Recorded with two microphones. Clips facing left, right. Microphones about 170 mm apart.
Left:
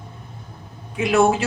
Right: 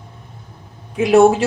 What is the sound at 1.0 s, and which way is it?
Speech, 35° right (ahead or behind).